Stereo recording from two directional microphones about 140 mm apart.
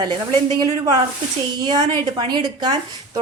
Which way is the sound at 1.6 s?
30° right (ahead or behind).